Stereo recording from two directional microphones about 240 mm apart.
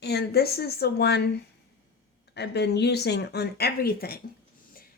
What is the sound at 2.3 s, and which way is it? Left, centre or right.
Speech, left.